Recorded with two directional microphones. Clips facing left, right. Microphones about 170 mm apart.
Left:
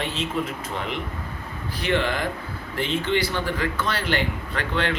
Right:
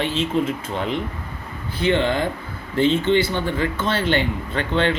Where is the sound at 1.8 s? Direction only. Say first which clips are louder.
Right 5 dB; 25° right (ahead or behind).